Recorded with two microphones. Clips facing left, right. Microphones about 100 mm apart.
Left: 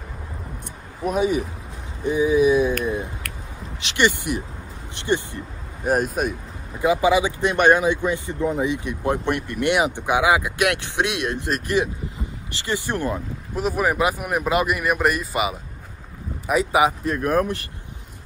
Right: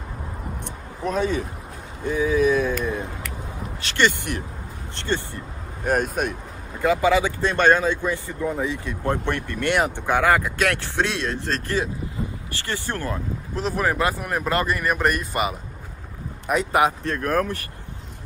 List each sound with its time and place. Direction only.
1.0 s speech: 10° left (ahead or behind)
5.9 s speech: centre (ahead or behind)